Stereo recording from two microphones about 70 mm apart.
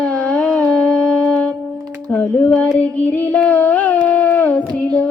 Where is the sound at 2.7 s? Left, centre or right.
Centre.